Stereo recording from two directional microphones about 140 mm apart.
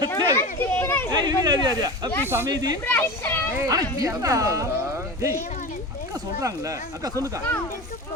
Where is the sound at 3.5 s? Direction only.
25° right (ahead or behind).